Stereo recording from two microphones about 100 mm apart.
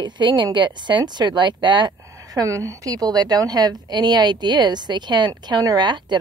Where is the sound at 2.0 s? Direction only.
30° right (ahead or behind).